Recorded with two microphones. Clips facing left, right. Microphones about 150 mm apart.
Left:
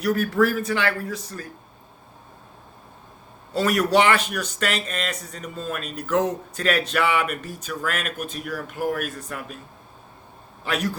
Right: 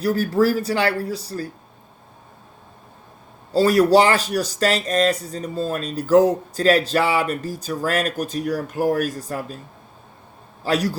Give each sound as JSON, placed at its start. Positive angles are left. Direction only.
{"t": 0.0, "sound": "speech", "side_deg": -30}
{"t": 3.5, "sound": "speech", "side_deg": -30}
{"t": 10.6, "sound": "a man's voice", "side_deg": -35}